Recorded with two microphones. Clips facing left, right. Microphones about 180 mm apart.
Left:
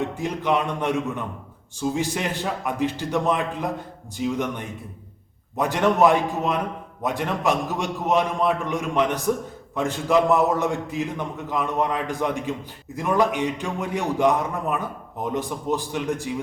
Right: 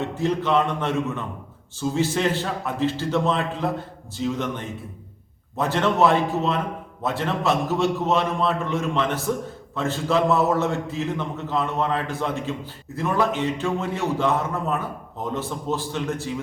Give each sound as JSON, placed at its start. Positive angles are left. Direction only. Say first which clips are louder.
{"t": 0.0, "sound": "a man's voice", "louder": "right 2 dB", "side_deg": 15}